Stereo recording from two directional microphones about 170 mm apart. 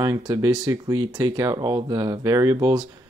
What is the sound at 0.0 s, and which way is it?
Speech, 25° right (ahead or behind).